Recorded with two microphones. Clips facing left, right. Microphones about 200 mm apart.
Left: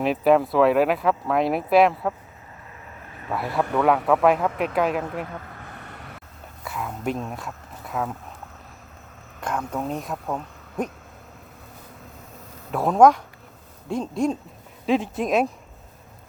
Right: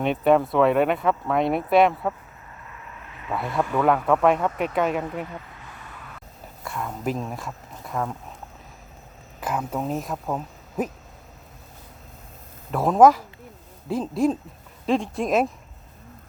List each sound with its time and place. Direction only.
0.0 s speech: centre (ahead or behind)
3.3 s speech: 5° left (ahead or behind)
5.5 s vehicle: 60° left (ahead or behind)
6.7 s speech: centre (ahead or behind)
9.4 s speech: 5° right (ahead or behind)
12.7 s speech: centre (ahead or behind)